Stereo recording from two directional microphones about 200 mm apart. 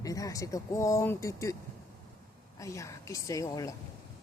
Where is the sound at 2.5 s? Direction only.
15° left (ahead or behind).